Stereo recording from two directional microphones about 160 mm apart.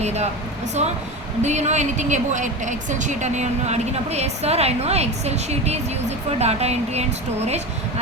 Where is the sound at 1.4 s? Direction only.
45° right (ahead or behind).